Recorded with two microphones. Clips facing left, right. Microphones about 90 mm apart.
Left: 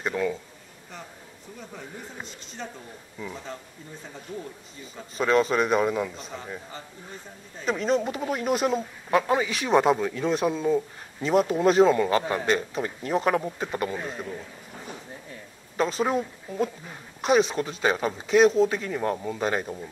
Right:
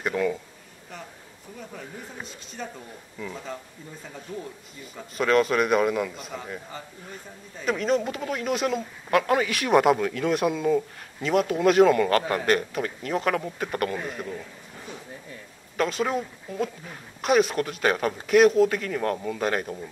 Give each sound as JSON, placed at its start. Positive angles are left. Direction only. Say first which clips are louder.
{"t": 0.0, "sound": "a man's voice", "louder": "right 1 dB", "side_deg": 0}
{"t": 4.9, "sound": "a man's voice", "louder": "right 1 dB", "side_deg": 0}
{"t": 9.1, "sound": "a man's voice", "louder": "right 1 dB", "side_deg": 15}
{"t": 15.8, "sound": "speech", "louder": "even", "side_deg": 35}
{"t": 16.1, "sound": "a man's voice", "louder": "left 2 dB", "side_deg": 5}
{"t": 17.8, "sound": "a man's voice", "louder": "even", "side_deg": 10}
{"t": 18.2, "sound": "a man's voice", "louder": "right 1 dB", "side_deg": -5}
{"t": 18.7, "sound": "a man's voice", "louder": "right 1 dB", "side_deg": 10}